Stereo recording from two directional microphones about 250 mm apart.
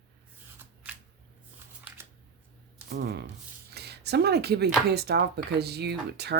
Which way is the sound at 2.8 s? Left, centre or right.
Right.